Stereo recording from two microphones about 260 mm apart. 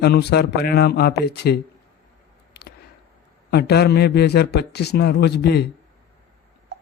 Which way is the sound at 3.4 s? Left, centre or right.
Left.